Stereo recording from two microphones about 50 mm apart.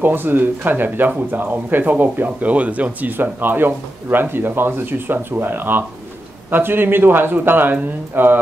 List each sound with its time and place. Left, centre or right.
0.0 s speech: right